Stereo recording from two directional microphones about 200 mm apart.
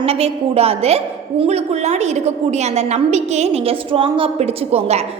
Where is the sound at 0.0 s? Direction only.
30° right (ahead or behind).